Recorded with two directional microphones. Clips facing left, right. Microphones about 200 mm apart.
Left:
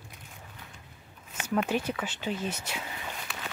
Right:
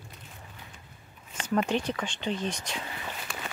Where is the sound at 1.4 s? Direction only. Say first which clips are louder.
Right 1 dB; 5° left (ahead or behind).